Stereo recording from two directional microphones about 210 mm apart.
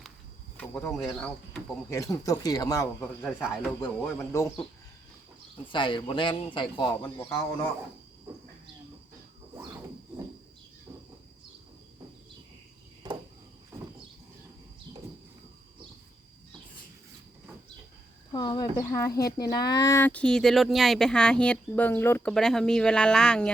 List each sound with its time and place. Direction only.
0.5 s speech: 5° left (ahead or behind)
1.9 s speech: 15° left (ahead or behind)
3.2 s speech: 5° right (ahead or behind)
3.8 s speech: 10° left (ahead or behind)
5.6 s speech: 25° left (ahead or behind)
13.0 s a sound: 20° right (ahead or behind)
18.3 s speech: 20° left (ahead or behind); by 23.5 s 5° left (ahead or behind)